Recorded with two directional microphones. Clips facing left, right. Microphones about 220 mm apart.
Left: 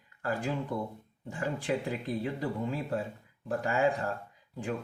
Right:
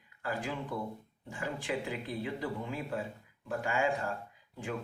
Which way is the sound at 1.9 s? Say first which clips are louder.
Left 4 dB; 45° left (ahead or behind).